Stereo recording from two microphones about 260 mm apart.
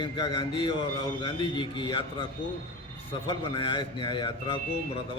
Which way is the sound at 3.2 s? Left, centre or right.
Centre.